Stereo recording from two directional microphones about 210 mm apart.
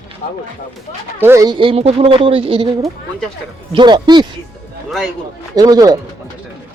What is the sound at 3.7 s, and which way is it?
Speech, 20° right (ahead or behind).